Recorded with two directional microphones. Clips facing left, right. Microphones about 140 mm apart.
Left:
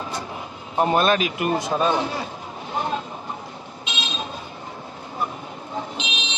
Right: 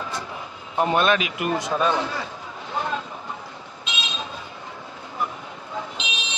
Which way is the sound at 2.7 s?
25° left (ahead or behind).